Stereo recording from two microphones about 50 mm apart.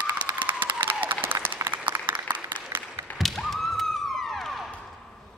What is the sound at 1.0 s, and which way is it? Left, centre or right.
Applause, right.